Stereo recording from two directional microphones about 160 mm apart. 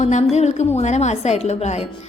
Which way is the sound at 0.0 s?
45° left (ahead or behind).